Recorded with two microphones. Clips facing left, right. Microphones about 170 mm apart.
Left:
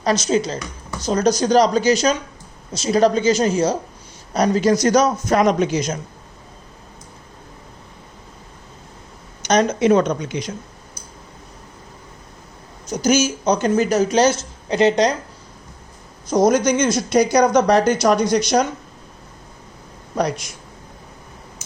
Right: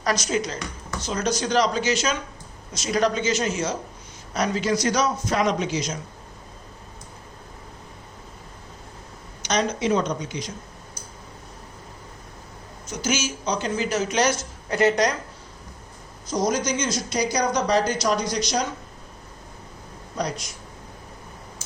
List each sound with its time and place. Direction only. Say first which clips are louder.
0.0 s a man's voice: left 6 dB; 25° left (ahead or behind); by 6.0 s 50° left (ahead or behind)
9.4 s speech: left 7 dB; 45° left (ahead or behind); by 10.5 s 65° left (ahead or behind)
12.9 s speech: left 9 dB; 40° left (ahead or behind); by 15.1 s 20° left (ahead or behind)
16.3 s speech: left 8 dB; 55° left (ahead or behind)
20.1 s speech: left 7 dB; 60° left (ahead or behind)